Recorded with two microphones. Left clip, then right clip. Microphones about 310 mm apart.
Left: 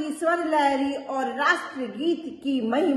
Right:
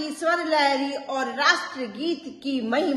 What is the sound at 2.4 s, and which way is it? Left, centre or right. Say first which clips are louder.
Speech: even; right.